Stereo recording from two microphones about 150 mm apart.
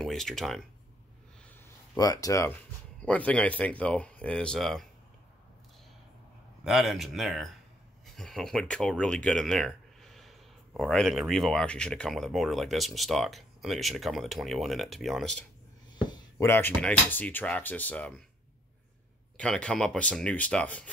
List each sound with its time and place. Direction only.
0.0 s speech: centre (ahead or behind)
2.0 s speech: 25° left (ahead or behind)
3.0 s speech: 10° left (ahead or behind)
6.6 s speech: centre (ahead or behind)
16.3 s speech: 15° left (ahead or behind)
19.3 s speech: 5° left (ahead or behind)